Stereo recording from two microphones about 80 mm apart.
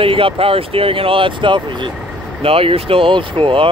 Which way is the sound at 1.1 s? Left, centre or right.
Right.